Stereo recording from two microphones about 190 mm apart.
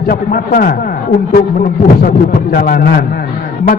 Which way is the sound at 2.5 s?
50° left (ahead or behind).